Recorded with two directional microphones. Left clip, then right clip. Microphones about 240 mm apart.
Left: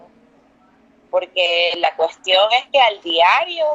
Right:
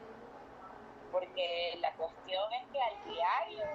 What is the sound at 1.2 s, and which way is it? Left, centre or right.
A woman's voice, left.